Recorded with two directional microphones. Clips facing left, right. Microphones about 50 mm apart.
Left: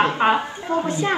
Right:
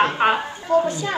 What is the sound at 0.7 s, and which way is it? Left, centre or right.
Speech, left.